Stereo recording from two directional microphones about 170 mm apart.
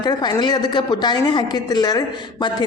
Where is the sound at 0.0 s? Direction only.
25° left (ahead or behind).